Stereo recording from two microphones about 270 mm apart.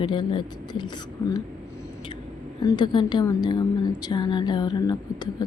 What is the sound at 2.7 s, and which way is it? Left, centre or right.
Speech, centre.